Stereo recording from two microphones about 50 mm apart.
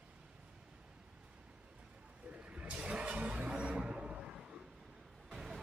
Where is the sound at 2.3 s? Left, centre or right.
Right.